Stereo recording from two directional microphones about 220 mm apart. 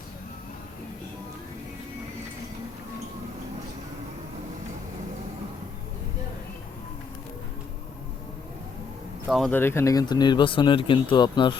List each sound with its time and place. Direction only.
9.2 s speech: centre (ahead or behind); by 11.5 s 20° left (ahead or behind)